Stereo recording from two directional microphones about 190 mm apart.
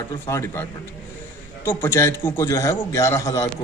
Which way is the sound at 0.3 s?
15° left (ahead or behind).